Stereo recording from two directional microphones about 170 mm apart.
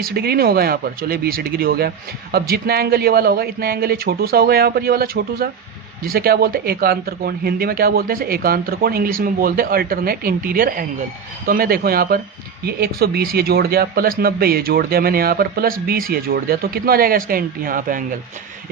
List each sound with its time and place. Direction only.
0.0 s speech: 65° right (ahead or behind)